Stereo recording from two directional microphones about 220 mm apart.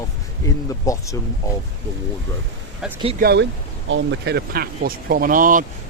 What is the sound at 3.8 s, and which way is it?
Speech, 55° right (ahead or behind).